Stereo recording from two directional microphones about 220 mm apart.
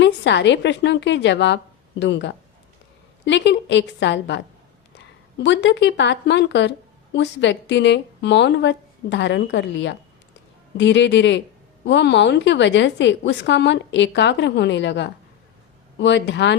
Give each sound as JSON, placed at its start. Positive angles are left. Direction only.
{"t": 0.0, "sound": "a woman's voice", "side_deg": 55}
{"t": 5.4, "sound": "a woman's voice", "side_deg": 55}